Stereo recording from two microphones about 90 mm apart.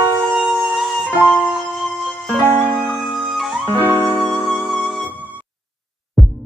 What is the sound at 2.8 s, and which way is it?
Music, centre (ahead or behind).